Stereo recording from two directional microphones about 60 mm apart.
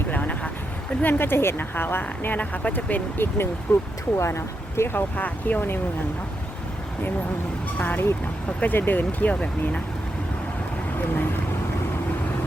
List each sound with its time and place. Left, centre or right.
0.1 s a sound: left
1.0 s speech: left
4.2 s speech: left
5.1 s speech: left
7.8 s speech: left
10.9 s speech: left